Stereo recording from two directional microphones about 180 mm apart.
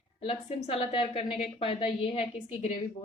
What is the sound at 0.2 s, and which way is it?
A woman's voice, 30° left (ahead or behind).